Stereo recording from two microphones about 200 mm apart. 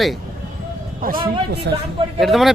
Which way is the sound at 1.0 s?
45° right (ahead or behind).